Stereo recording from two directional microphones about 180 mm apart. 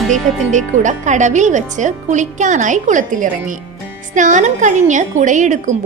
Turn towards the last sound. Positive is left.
turn(degrees=-45)  # may be behind; listen again after turning